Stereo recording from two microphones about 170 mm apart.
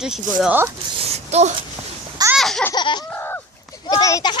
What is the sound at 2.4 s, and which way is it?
Baby laughter, centre (ahead or behind).